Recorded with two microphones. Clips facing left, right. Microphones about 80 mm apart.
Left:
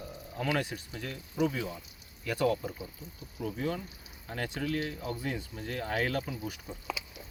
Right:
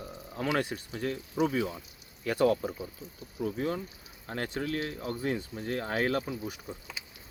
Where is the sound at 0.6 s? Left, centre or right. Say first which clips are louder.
Right 5 dB; right.